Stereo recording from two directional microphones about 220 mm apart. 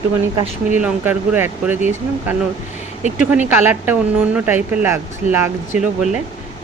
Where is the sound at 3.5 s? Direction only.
10° right (ahead or behind).